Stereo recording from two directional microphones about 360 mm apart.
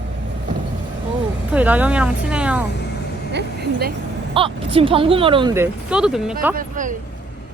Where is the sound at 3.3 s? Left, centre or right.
Right.